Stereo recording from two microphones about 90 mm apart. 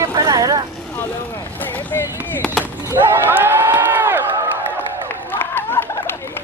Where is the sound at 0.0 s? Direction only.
35° right (ahead or behind).